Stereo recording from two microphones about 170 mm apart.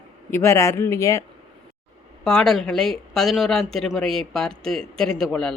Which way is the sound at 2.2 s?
5° left (ahead or behind).